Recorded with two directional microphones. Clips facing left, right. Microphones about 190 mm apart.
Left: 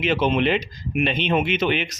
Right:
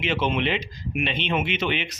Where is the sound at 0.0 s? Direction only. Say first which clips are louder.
Left 4 dB; 40° left (ahead or behind).